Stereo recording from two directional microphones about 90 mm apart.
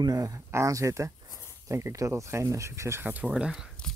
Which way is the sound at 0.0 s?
40° right (ahead or behind).